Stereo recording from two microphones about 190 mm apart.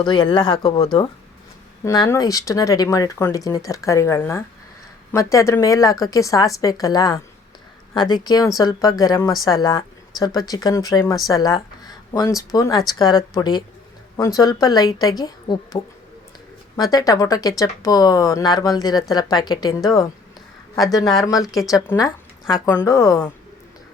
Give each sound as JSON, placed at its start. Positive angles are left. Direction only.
{"t": 0.0, "sound": "a woman's voice", "side_deg": 25}
{"t": 21.4, "sound": "speech", "side_deg": 0}
{"t": 21.8, "sound": "speech", "side_deg": 20}